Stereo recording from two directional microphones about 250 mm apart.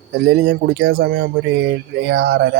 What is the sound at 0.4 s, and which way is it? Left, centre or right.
Speech, right.